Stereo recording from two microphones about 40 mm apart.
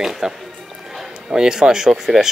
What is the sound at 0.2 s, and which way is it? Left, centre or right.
A woman's voice, centre.